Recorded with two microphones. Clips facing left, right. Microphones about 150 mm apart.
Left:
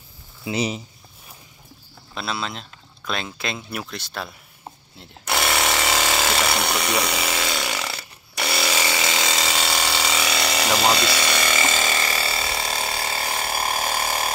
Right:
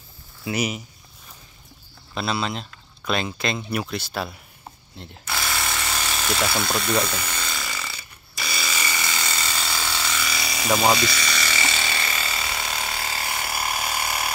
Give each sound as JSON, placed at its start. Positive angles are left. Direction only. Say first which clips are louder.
{"t": 0.5, "sound": "speech", "louder": "left 1 dB", "side_deg": 25}
{"t": 2.1, "sound": "speech", "louder": "right 3 dB", "side_deg": 0}
{"t": 5.2, "sound": "a sound", "louder": "left 6 dB", "side_deg": 75}
{"t": 11.0, "sound": "ratchet", "louder": "left 3 dB", "side_deg": 65}